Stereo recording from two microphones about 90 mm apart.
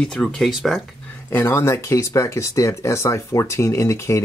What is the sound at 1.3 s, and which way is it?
Speech, 30° left (ahead or behind).